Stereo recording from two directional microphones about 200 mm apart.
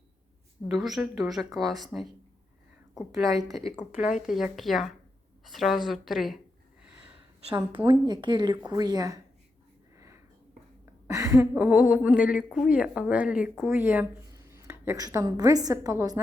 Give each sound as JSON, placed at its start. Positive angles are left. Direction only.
{"t": 0.7, "sound": "speech", "side_deg": 0}
{"t": 3.7, "sound": "speech", "side_deg": 35}
{"t": 4.3, "sound": "speech", "side_deg": 0}
{"t": 7.9, "sound": "a woman's voice", "side_deg": -20}
{"t": 11.1, "sound": "speech", "side_deg": -15}